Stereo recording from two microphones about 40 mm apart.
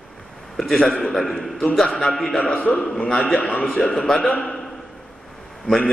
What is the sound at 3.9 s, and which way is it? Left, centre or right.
Speech, centre.